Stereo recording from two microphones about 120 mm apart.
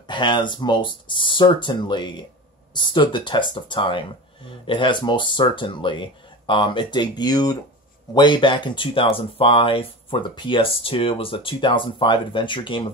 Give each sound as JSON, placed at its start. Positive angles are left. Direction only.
{"t": 0.1, "sound": "speech", "side_deg": 40}